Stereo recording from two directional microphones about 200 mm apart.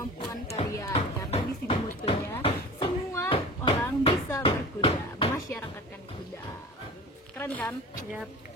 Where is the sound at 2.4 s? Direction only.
25° left (ahead or behind).